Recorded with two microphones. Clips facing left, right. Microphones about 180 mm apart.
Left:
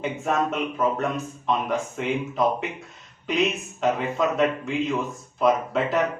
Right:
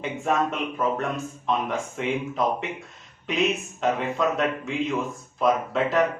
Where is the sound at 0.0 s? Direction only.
Centre (ahead or behind).